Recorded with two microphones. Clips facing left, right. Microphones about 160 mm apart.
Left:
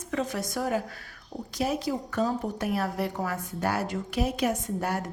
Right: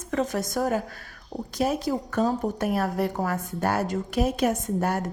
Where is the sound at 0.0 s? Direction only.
45° right (ahead or behind).